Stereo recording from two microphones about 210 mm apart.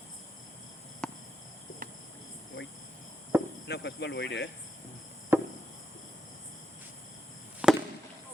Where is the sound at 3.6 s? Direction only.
55° left (ahead or behind).